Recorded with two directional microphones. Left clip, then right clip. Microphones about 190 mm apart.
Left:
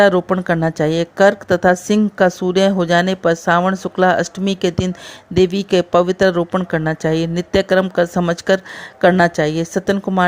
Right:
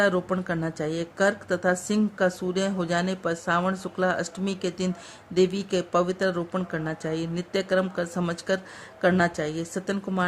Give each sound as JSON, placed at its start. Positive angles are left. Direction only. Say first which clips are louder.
{"t": 0.0, "sound": "speech", "louder": "left 11 dB", "side_deg": 35}